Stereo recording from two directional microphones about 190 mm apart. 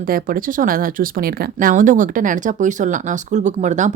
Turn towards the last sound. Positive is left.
turn(degrees=-40)  # may be behind; listen again after turning